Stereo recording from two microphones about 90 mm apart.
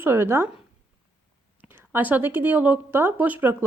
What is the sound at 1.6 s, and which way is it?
Speech, 25° right (ahead or behind).